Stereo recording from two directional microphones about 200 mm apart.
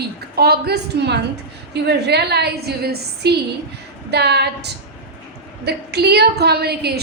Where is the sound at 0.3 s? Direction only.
50° right (ahead or behind).